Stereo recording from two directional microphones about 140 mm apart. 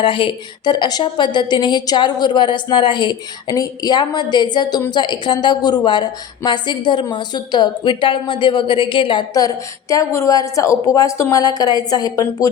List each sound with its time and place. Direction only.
0.0 s a woman's voice: 40° left (ahead or behind)